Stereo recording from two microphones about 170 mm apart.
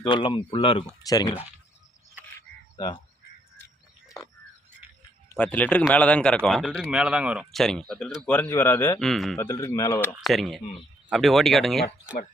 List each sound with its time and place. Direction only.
0.0 s speech: 30° left (ahead or behind)
2.7 s speech: 25° left (ahead or behind)
5.4 s speech: 5° left (ahead or behind)
9.0 s speech: centre (ahead or behind)
9.4 s speech: 15° left (ahead or behind)
10.2 s speech: centre (ahead or behind)